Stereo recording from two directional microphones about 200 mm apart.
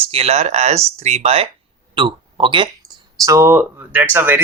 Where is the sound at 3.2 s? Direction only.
15° right (ahead or behind).